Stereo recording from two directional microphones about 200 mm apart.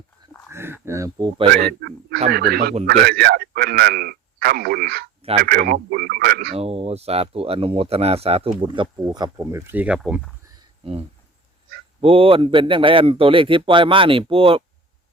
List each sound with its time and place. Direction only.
0.5 s speech: 10° right (ahead or behind)
2.3 s a man's voice: 50° right (ahead or behind)
6.5 s speech: 30° right (ahead or behind); by 10.3 s centre (ahead or behind)
11.9 s speech: 25° right (ahead or behind)